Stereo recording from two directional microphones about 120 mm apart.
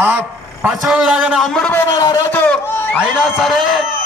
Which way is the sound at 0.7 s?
5° right (ahead or behind).